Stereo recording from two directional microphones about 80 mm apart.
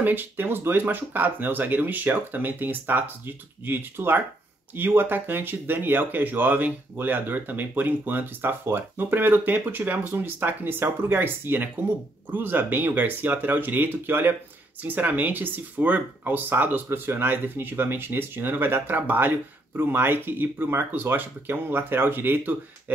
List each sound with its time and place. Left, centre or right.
0.0 s speech: right